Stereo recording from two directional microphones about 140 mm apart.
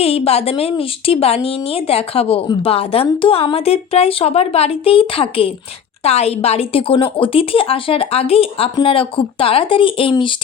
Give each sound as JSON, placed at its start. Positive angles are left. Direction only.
{"t": 0.0, "sound": "a woman's voice", "side_deg": 45}